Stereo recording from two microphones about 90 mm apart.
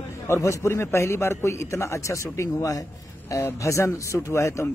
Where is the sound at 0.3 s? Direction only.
35° left (ahead or behind).